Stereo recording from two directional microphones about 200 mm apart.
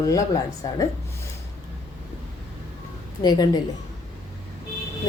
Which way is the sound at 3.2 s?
20° left (ahead or behind).